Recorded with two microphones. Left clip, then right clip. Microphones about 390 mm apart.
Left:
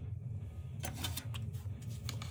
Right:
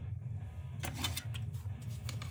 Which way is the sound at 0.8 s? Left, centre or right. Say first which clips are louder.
Right 3 dB; right.